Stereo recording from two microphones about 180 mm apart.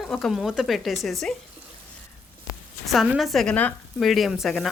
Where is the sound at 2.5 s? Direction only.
20° left (ahead or behind).